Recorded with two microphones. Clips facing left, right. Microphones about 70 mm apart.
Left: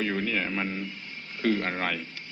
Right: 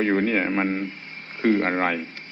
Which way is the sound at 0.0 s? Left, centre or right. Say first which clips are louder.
Right 7 dB; right.